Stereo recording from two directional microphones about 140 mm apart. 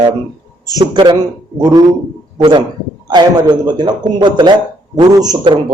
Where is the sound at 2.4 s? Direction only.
35° right (ahead or behind).